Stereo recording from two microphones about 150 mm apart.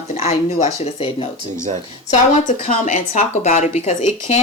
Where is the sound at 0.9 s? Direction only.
40° left (ahead or behind).